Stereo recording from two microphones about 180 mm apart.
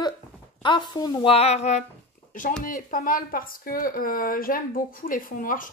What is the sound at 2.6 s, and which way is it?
Speech, 50° left (ahead or behind).